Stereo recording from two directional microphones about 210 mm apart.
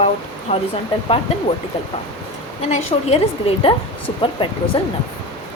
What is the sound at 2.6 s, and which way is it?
A woman's voice, 30° left (ahead or behind).